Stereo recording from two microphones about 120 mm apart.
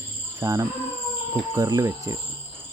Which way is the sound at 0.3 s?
25° right (ahead or behind).